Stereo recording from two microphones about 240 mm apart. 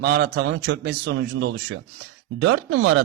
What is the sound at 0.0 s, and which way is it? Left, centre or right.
A man's voice, right.